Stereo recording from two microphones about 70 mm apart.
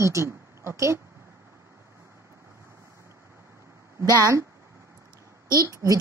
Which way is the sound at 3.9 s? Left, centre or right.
Right.